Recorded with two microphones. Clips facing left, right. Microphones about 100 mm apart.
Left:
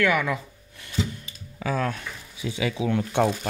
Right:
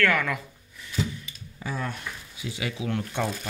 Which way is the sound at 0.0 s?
15° left (ahead or behind).